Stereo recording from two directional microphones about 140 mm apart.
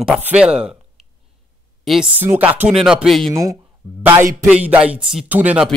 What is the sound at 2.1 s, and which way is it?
Speech, 15° right (ahead or behind).